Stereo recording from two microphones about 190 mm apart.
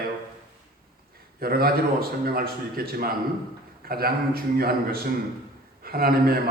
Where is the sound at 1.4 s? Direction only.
50° right (ahead or behind).